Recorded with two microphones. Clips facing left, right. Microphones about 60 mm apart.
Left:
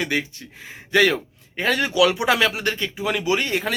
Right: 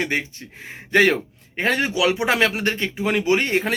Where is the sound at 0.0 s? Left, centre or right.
Right.